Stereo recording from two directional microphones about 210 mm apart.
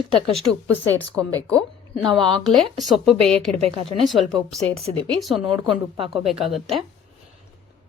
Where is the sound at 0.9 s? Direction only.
5° left (ahead or behind).